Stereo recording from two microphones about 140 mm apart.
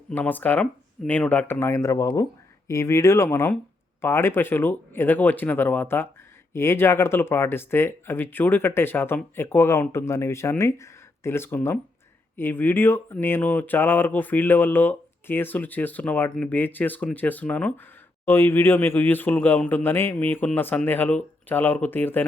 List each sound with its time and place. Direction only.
0.1 s speech: 15° left (ahead or behind)